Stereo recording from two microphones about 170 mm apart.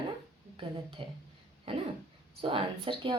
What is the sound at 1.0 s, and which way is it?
Speech, 35° right (ahead or behind).